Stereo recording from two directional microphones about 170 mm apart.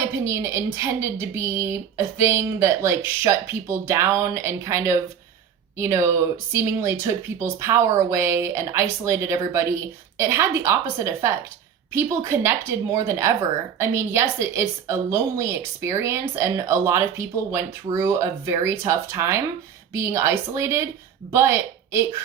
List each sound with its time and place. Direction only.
0.3 s a woman's voice: 15° right (ahead or behind)